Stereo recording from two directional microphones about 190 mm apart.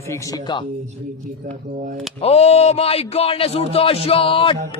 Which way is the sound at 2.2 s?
35° left (ahead or behind).